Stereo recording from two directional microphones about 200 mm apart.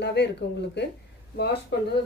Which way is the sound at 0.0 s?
55° left (ahead or behind).